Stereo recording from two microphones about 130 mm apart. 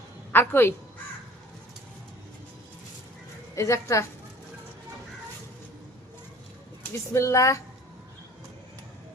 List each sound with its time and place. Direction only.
0.3 s a woman's voice: 15° left (ahead or behind)
3.5 s a woman's voice: 25° left (ahead or behind)
7.1 s a woman's voice: 20° left (ahead or behind)